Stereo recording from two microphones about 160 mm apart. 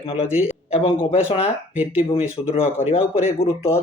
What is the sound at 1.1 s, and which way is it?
Speech, 35° left (ahead or behind).